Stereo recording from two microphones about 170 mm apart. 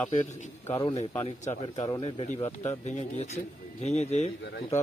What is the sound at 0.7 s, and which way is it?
Speech, 30° left (ahead or behind).